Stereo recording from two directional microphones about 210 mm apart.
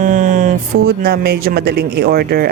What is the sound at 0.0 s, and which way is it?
Speech, 40° right (ahead or behind).